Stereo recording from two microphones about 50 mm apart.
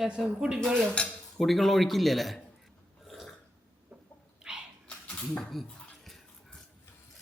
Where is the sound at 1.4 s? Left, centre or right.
Centre.